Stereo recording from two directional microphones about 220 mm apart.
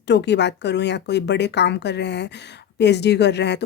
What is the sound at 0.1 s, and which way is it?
Speech, 50° left (ahead or behind).